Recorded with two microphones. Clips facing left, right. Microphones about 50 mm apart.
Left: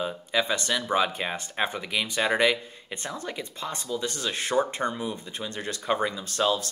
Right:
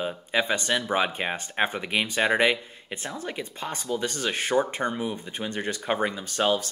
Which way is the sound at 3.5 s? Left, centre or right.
Right.